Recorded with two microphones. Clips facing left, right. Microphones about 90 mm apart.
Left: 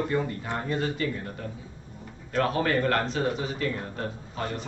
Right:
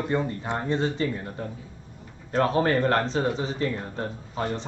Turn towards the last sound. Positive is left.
turn(degrees=-25)  # may be behind; listen again after turning